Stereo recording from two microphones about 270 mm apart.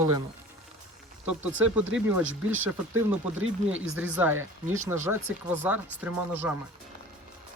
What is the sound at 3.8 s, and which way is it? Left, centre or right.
Speech, centre.